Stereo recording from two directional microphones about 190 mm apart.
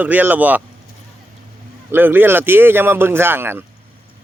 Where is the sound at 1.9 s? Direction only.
10° right (ahead or behind).